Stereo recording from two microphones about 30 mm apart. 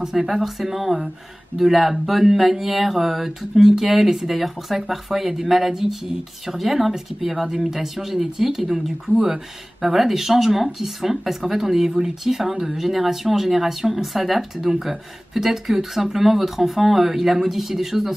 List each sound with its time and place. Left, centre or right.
0.0 s speech: centre